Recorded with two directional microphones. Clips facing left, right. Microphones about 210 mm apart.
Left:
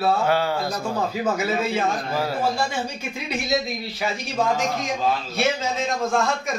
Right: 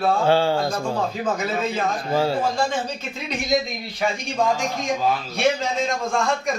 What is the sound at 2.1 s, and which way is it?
Speech, 25° right (ahead or behind).